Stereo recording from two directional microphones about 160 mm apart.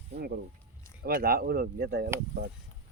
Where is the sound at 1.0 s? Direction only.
70° right (ahead or behind).